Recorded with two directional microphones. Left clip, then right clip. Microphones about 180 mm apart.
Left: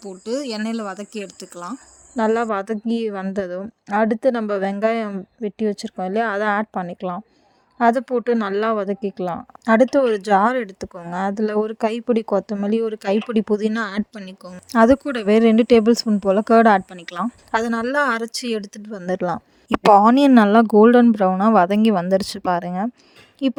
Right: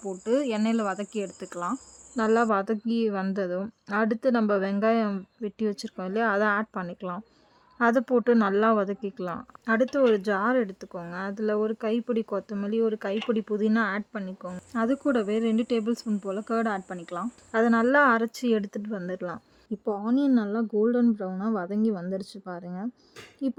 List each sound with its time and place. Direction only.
0.3 s speech: centre (ahead or behind)
2.1 s speech: 25° left (ahead or behind)
13.9 s a woman's voice: 10° left (ahead or behind)
14.7 s speech: 45° left (ahead or behind)
19.9 s speech: 65° left (ahead or behind)